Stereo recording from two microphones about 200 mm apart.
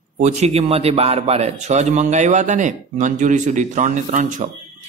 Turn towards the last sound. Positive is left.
turn(degrees=-40)  # may be behind; listen again after turning